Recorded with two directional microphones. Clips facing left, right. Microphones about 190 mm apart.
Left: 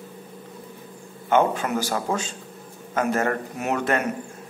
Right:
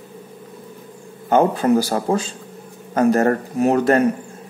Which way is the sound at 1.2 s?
35° right (ahead or behind).